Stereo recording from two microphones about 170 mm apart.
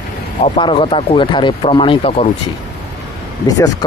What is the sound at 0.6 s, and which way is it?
Speech, 30° left (ahead or behind).